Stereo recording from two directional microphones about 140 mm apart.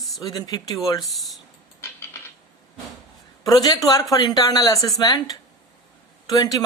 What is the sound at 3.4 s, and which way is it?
Speech, 30° left (ahead or behind).